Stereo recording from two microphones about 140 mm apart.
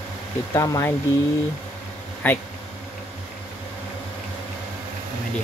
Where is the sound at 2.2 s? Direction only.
15° left (ahead or behind).